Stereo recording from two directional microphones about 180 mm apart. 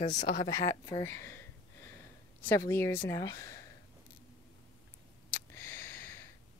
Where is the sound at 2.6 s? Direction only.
15° left (ahead or behind).